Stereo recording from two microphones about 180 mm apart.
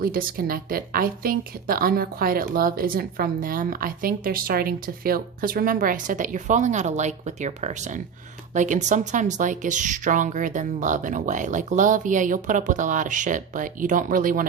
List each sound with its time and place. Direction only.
0.0 s a woman's voice: 55° right (ahead or behind)